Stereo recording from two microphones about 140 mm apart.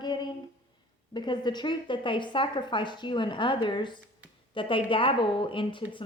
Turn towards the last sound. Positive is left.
turn(degrees=35)  # may be behind; listen again after turning